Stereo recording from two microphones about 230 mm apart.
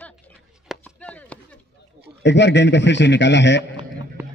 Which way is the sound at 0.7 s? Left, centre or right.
Centre.